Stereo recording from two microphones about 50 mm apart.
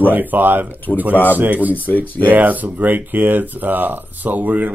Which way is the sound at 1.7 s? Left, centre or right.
Left.